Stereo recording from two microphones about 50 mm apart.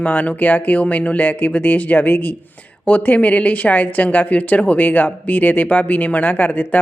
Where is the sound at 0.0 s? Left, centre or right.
Left.